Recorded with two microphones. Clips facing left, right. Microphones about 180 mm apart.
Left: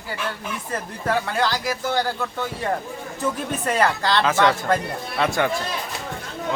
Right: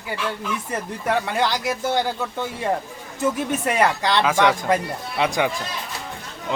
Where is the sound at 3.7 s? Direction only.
15° right (ahead or behind).